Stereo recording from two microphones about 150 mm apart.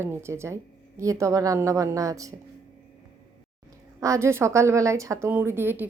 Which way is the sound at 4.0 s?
20° right (ahead or behind).